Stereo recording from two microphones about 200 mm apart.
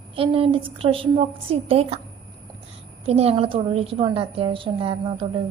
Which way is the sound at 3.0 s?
30° right (ahead or behind).